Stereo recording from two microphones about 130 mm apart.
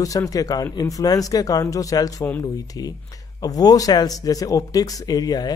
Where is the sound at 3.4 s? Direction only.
30° left (ahead or behind).